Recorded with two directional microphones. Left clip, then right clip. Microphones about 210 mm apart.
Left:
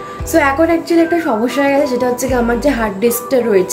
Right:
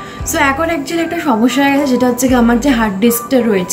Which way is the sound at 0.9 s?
5° left (ahead or behind).